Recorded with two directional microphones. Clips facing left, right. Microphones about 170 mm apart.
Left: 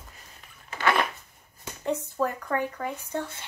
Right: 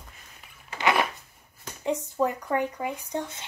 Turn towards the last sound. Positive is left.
turn(degrees=-15)  # may be behind; listen again after turning